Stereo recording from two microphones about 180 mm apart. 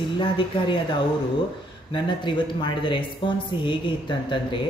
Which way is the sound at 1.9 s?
25° left (ahead or behind).